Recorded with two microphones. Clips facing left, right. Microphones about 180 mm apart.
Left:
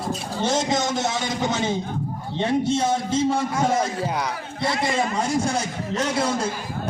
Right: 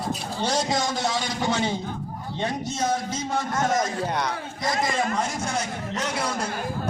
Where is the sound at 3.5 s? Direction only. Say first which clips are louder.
Left 2 dB; 10° left (ahead or behind).